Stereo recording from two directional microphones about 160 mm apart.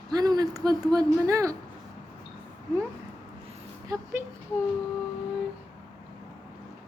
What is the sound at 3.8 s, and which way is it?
Speech, 20° right (ahead or behind).